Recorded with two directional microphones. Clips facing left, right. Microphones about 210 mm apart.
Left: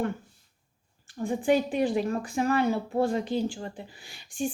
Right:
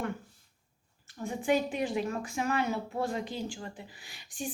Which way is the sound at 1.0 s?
30° left (ahead or behind).